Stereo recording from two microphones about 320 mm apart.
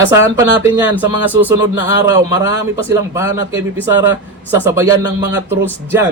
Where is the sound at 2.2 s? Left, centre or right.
Centre.